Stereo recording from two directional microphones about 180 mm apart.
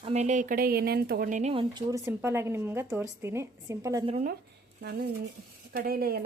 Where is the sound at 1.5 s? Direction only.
25° right (ahead or behind).